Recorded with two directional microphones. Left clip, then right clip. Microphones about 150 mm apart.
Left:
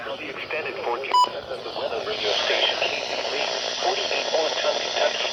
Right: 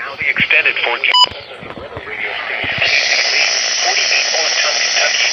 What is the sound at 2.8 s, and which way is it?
Radio, 20° left (ahead or behind).